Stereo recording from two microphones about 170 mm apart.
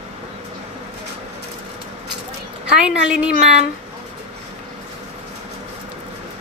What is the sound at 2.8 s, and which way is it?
Speech, 5° right (ahead or behind).